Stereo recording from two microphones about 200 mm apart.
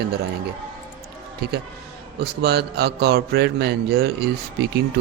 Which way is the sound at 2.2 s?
55° right (ahead or behind).